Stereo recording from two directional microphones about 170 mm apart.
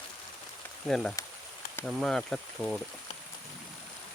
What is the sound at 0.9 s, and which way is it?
Speech, centre (ahead or behind).